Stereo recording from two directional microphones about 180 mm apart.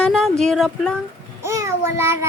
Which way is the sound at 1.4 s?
15° right (ahead or behind).